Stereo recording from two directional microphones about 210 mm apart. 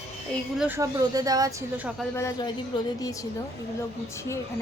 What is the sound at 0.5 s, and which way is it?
Speech, 5° right (ahead or behind).